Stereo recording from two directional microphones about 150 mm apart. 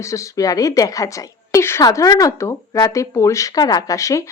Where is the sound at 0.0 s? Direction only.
20° left (ahead or behind).